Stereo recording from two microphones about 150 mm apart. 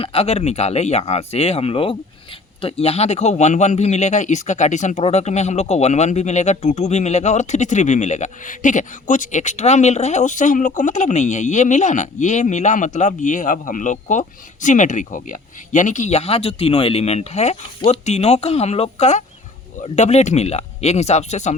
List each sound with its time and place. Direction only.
0.0 s a man's voice: 40° left (ahead or behind)